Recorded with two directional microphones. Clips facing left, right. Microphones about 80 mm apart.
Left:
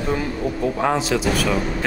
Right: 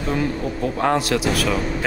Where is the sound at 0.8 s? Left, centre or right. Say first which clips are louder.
Right 2 dB; centre.